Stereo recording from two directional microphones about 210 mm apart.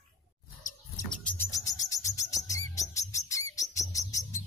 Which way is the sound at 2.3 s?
15° left (ahead or behind).